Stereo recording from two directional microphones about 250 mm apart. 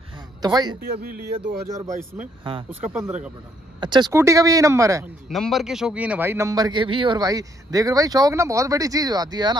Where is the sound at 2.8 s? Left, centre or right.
Centre.